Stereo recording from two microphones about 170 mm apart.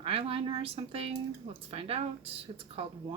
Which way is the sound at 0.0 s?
35° right (ahead or behind).